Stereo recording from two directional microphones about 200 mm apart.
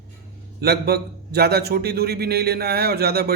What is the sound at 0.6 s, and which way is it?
A man's voice, 50° right (ahead or behind).